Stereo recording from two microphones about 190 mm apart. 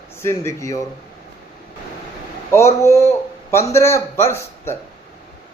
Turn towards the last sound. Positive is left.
turn(degrees=15)  # may be behind; listen again after turning